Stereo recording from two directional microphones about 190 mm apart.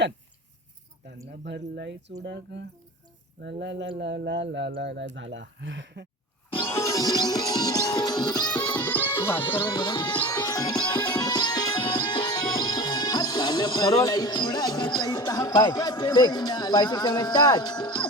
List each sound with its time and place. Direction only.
1.5 s speech: 65° right (ahead or behind)
6.7 s music: 15° left (ahead or behind)
8.7 s music: 10° left (ahead or behind)
9.4 s music: 25° left (ahead or behind)
14.0 s speech: 20° left (ahead or behind)